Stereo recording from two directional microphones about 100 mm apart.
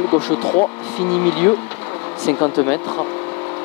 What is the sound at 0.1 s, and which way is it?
Speech, 25° left (ahead or behind).